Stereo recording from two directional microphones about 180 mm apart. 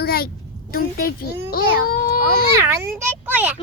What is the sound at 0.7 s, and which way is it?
A child's voice, 55° left (ahead or behind).